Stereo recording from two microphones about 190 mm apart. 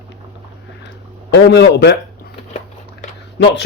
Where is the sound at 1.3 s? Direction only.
60° left (ahead or behind).